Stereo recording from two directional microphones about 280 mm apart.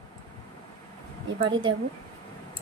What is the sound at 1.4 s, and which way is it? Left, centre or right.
Speech, centre.